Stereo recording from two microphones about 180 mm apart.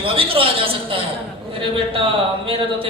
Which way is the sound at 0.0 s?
30° right (ahead or behind).